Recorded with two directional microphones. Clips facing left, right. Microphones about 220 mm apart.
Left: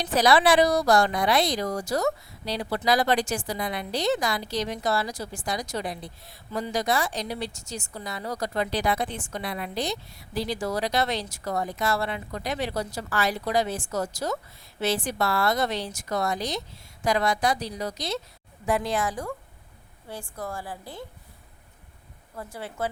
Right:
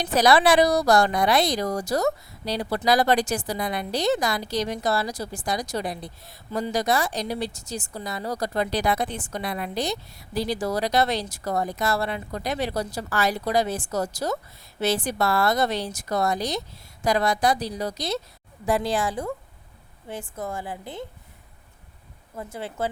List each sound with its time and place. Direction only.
0.0 s a woman's voice: 45° right (ahead or behind); by 21.0 s 20° right (ahead or behind)
22.4 s a woman's voice: 25° right (ahead or behind)